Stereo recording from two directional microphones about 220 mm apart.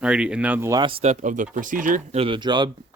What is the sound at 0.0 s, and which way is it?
Speech, 5° right (ahead or behind).